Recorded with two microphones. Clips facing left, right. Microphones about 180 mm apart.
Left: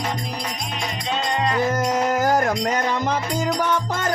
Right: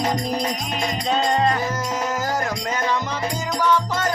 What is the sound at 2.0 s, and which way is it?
Music, 55° left (ahead or behind).